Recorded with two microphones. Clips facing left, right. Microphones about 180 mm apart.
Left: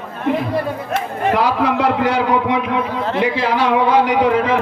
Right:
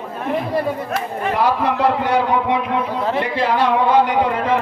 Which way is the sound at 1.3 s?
90° left.